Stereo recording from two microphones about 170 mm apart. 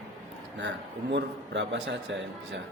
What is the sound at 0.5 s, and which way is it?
A man's voice, 90° right.